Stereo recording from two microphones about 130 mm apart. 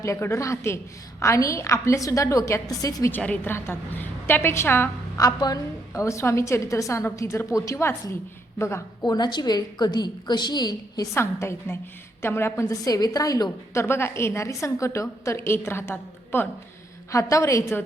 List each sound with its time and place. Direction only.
0.0 s a woman's voice: 20° left (ahead or behind)
3.1 s a woman's voice: 10° left (ahead or behind)
5.1 s a woman's voice: 30° left (ahead or behind)
9.1 s a woman's voice: 30° left (ahead or behind)